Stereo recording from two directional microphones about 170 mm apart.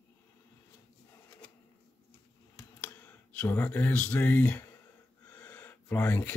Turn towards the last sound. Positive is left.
turn(degrees=10)  # may be behind; listen again after turning